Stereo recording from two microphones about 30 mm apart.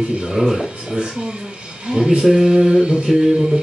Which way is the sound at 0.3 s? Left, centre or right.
Centre.